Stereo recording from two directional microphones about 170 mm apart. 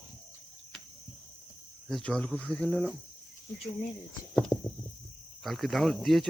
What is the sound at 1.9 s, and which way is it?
Speech, 5° left (ahead or behind).